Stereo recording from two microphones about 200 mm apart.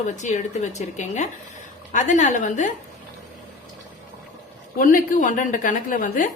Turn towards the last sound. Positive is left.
turn(degrees=40)  # may be behind; listen again after turning